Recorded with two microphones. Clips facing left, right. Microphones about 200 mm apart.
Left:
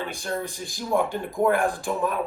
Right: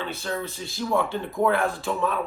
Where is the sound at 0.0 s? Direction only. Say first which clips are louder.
Even; 15° left (ahead or behind).